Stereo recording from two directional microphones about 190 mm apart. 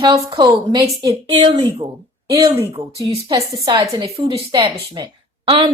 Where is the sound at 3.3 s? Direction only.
20° right (ahead or behind).